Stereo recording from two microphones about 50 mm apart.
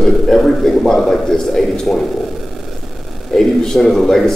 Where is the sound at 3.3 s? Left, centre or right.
Centre.